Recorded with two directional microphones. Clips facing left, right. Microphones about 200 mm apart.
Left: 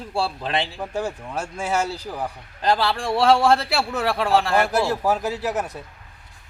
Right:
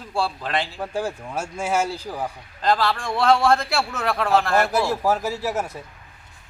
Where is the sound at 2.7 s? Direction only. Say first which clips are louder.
Even; 25° left (ahead or behind).